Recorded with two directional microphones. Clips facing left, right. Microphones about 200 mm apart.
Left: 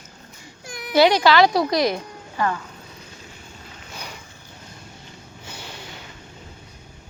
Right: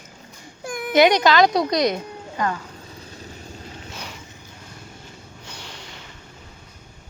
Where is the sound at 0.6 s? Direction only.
50° right (ahead or behind).